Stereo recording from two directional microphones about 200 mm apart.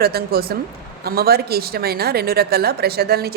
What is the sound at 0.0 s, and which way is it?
Speech, 50° right (ahead or behind).